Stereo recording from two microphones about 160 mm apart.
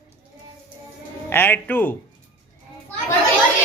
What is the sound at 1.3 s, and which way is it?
Speech, 15° left (ahead or behind).